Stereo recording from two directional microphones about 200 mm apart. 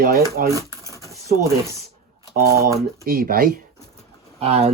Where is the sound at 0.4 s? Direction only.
45° right (ahead or behind).